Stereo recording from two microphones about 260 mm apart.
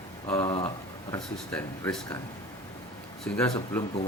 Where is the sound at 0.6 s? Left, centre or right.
Left.